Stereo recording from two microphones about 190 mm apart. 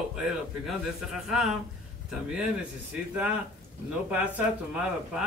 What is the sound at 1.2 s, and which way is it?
Speech, centre (ahead or behind).